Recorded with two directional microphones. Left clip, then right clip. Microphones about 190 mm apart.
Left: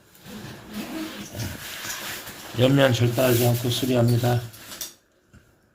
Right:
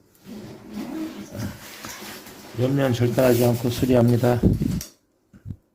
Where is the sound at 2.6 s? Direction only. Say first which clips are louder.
Left 4 dB; 5° right (ahead or behind).